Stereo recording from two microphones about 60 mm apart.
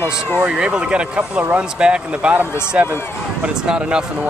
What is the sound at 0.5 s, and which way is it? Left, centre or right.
Speech, centre.